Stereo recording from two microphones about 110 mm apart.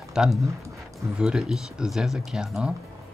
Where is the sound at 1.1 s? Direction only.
5° right (ahead or behind).